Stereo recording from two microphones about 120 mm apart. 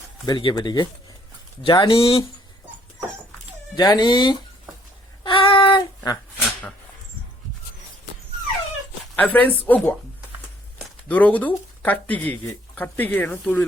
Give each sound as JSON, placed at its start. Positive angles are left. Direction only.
{"t": 0.3, "sound": "speech", "side_deg": 40}
{"t": 3.8, "sound": "speech", "side_deg": 35}
{"t": 5.2, "sound": "child singing", "side_deg": 45}
{"t": 9.1, "sound": "speech", "side_deg": 15}
{"t": 11.1, "sound": "speech", "side_deg": 15}